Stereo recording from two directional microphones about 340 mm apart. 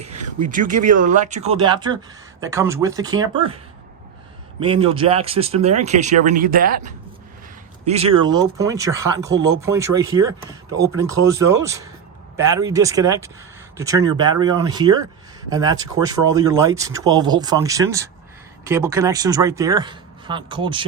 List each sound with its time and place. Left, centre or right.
0.0 s a sound: centre
0.4 s speech: right
4.6 s speech: centre